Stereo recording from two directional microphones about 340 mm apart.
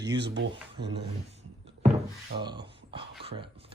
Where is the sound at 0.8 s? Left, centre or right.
Right.